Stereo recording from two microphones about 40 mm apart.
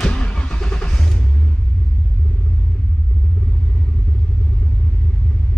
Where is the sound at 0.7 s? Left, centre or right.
Left.